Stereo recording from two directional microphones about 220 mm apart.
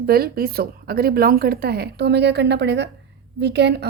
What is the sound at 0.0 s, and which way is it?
A woman's voice, 45° right (ahead or behind).